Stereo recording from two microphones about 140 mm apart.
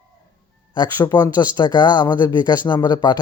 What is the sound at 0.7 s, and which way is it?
A man's voice, 30° left (ahead or behind).